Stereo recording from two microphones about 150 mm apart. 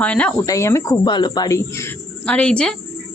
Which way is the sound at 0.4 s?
20° left (ahead or behind).